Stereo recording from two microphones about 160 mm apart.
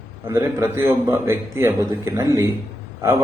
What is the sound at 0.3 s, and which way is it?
A man's voice, 15° right (ahead or behind).